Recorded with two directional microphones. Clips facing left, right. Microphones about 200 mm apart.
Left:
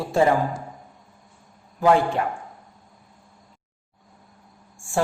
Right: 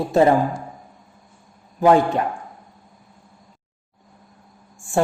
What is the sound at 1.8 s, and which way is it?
Speech, 20° right (ahead or behind).